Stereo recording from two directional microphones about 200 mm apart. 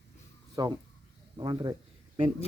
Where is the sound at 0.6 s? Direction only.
20° right (ahead or behind).